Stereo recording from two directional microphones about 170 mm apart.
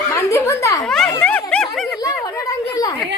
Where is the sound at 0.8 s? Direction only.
5° left (ahead or behind).